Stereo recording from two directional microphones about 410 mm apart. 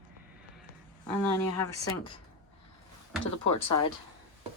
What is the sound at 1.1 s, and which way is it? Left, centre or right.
Speech, centre.